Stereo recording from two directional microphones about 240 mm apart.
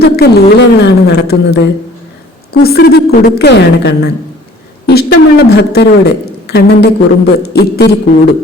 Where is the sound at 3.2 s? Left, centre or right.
Left.